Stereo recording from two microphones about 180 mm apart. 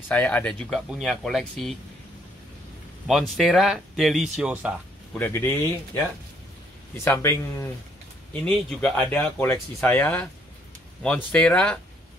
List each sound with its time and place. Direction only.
0.1 s speech: 10° left (ahead or behind)
3.1 s speech: centre (ahead or behind)
5.1 s speech: 10° left (ahead or behind)
7.1 s speech: 15° left (ahead or behind)
8.3 s speech: 5° left (ahead or behind)
11.3 s speech: 5° left (ahead or behind)